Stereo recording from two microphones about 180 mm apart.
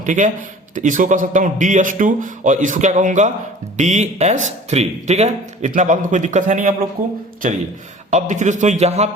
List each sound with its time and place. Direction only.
0.0 s a man's voice: 45° right (ahead or behind)
8.1 s speech: 45° right (ahead or behind)